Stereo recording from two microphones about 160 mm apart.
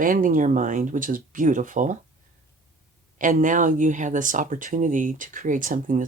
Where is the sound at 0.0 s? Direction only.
55° right (ahead or behind).